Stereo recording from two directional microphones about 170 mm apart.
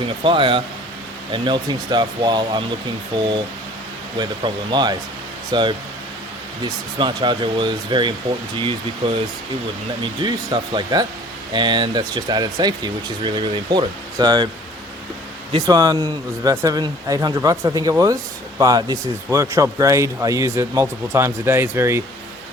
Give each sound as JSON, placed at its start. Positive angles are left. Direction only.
{"t": 0.0, "sound": "speech", "side_deg": -30}
{"t": 7.0, "sound": "speech", "side_deg": -30}
{"t": 15.5, "sound": "speech", "side_deg": -20}